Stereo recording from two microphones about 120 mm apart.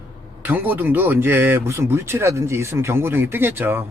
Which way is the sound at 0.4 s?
15° right (ahead or behind).